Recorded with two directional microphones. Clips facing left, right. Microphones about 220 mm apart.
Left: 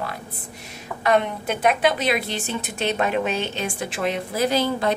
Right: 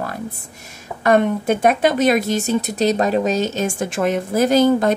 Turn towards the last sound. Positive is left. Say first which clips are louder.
# right 7 dB
turn(degrees=-45)  # may be behind; listen again after turning